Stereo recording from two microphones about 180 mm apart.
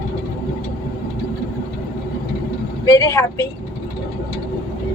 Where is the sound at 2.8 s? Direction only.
15° left (ahead or behind).